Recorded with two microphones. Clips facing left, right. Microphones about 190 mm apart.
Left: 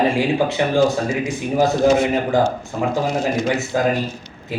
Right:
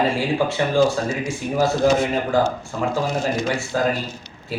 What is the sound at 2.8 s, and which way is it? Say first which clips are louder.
Speech: left 2 dB; 15° left (ahead or behind).